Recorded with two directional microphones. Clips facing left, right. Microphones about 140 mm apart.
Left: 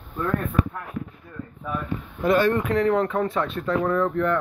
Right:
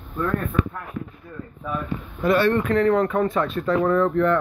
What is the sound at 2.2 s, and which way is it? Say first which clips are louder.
Speech: right 1 dB; 20° left (ahead or behind).